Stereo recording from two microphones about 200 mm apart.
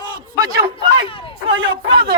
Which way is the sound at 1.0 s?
25° left (ahead or behind).